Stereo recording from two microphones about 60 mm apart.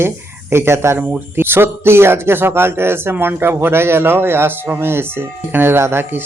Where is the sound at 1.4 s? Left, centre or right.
Right.